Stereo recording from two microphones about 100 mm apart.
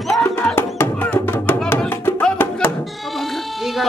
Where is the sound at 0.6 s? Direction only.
20° left (ahead or behind).